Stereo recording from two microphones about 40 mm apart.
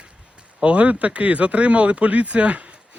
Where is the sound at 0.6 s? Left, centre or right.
Right.